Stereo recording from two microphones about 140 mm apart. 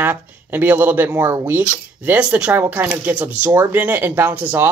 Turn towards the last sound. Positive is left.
turn(degrees=-15)  # may be behind; listen again after turning